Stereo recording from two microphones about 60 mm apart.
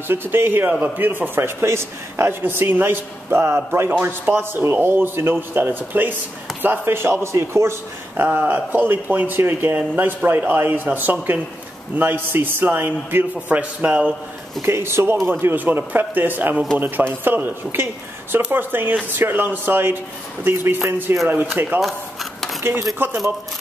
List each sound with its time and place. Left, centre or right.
0.1 s a man's voice: right
4.3 s a man's voice: right
8.3 s a man's voice: right
14.6 s speech: right
15.2 s a man's voice: right